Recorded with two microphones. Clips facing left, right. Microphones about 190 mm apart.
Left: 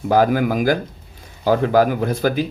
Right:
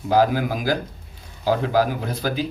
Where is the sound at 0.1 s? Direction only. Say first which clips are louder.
Left 3 dB; 55° left (ahead or behind).